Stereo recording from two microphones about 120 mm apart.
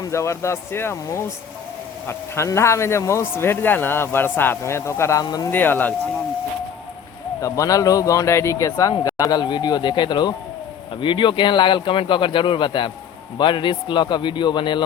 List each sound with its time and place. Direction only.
0.0 s speech: 25° left (ahead or behind)
5.2 s a man's voice: 35° left (ahead or behind)
5.5 s speech: 15° left (ahead or behind)
7.4 s a man's voice: 30° left (ahead or behind)